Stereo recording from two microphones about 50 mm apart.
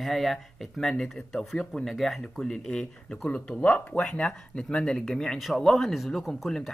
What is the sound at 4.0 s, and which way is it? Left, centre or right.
Speech, centre.